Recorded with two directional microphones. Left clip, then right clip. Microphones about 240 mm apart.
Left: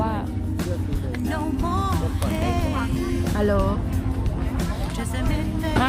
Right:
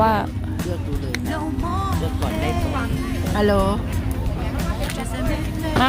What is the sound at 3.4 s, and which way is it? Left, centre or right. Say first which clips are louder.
Speech: right 4 dB; right.